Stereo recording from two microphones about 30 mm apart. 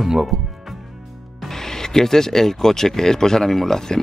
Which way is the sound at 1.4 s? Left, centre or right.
Centre.